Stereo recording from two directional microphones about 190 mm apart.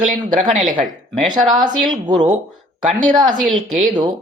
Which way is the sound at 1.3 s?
25° right (ahead or behind).